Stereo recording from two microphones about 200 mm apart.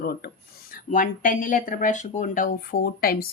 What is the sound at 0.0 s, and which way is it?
Speech, 50° left (ahead or behind).